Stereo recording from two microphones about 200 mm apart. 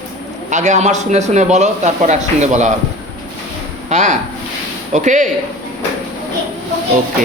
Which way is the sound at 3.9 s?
35° right (ahead or behind).